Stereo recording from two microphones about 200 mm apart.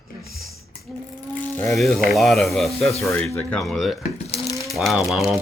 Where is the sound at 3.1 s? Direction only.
15° left (ahead or behind).